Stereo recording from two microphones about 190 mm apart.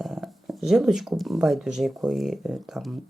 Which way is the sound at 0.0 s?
Centre (ahead or behind).